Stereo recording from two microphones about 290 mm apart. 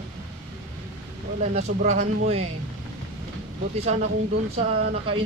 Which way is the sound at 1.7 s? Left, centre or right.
Right.